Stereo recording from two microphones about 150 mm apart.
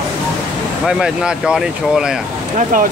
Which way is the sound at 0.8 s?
5° right (ahead or behind).